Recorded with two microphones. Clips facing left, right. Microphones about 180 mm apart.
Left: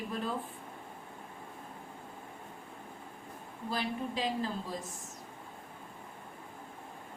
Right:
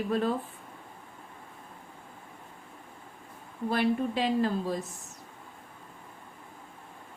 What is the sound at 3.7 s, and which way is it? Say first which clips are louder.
Speech: right 8 dB; 65° right (ahead or behind).